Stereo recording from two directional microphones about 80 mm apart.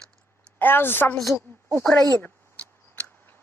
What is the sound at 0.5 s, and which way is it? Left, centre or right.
Speech, left.